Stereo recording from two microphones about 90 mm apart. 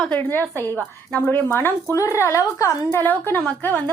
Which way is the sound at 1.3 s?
25° left (ahead or behind).